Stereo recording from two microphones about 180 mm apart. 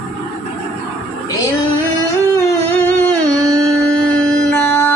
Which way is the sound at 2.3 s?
15° left (ahead or behind).